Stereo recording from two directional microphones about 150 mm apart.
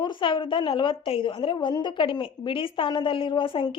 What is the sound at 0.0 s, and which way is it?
A woman's voice, 30° left (ahead or behind).